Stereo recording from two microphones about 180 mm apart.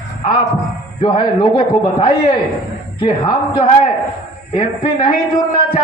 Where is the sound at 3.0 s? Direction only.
30° left (ahead or behind).